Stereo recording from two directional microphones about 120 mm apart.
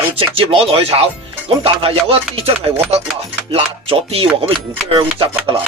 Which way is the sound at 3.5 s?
50° right (ahead or behind).